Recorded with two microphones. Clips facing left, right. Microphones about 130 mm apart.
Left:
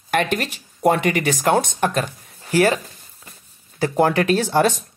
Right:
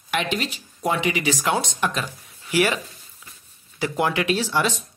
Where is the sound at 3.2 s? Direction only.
45° left (ahead or behind).